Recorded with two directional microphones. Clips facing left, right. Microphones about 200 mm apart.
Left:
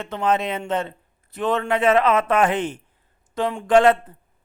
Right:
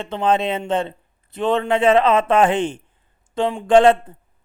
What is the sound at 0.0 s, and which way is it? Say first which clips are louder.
Speech: right 3 dB; 30° right (ahead or behind).